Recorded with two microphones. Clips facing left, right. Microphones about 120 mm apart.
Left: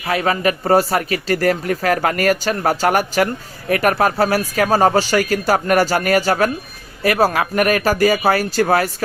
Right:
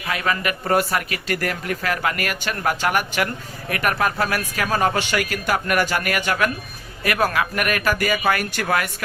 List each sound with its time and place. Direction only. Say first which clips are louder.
0.0 s speech: left 6 dB; 35° left (ahead or behind)